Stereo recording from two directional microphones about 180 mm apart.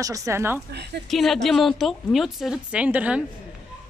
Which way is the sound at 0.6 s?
65° right (ahead or behind).